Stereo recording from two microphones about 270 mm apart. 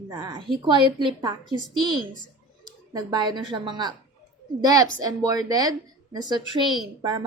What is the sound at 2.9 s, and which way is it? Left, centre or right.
Speech, centre.